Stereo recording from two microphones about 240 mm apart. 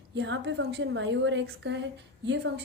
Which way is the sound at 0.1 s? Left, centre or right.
Right.